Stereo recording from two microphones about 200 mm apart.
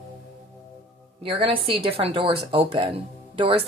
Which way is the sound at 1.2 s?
25° right (ahead or behind).